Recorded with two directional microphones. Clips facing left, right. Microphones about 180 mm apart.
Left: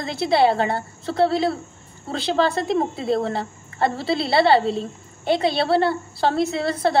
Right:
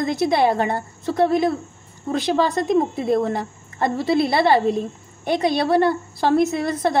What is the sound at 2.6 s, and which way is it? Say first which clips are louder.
Speech: right 3 dB; 30° left (ahead or behind).